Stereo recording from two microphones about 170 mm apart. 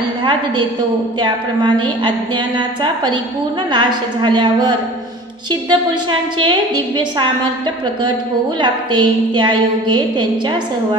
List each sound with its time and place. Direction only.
1.2 s a woman's voice: 25° right (ahead or behind)
8.5 s a woman's voice: 25° right (ahead or behind)